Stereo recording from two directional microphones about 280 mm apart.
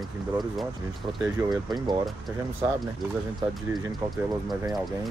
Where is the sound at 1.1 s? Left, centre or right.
Centre.